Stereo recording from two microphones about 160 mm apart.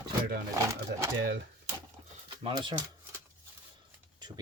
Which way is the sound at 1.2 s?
90° right.